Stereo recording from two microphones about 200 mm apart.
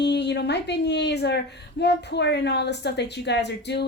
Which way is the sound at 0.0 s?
60° left (ahead or behind).